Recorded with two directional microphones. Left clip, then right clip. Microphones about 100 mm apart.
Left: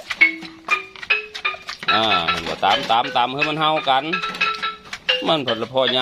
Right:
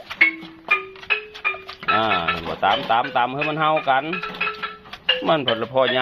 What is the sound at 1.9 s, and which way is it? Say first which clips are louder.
Speech: left 2 dB; 30° left (ahead or behind).